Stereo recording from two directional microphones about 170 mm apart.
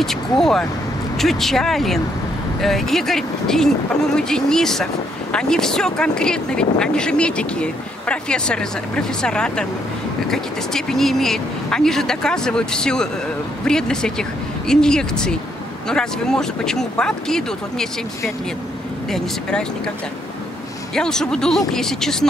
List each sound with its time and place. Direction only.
0.0 s speech: centre (ahead or behind)
20.9 s speech: 5° left (ahead or behind)